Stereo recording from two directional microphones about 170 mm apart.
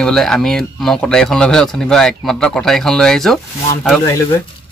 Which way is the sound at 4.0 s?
20° left (ahead or behind).